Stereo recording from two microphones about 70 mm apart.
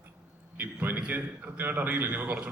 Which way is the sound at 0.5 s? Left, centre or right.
Right.